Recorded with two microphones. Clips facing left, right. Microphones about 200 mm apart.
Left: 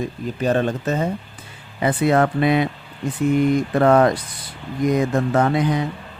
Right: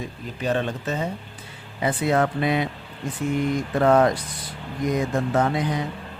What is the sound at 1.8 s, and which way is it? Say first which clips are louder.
Speech: left 4 dB; 60° left (ahead or behind).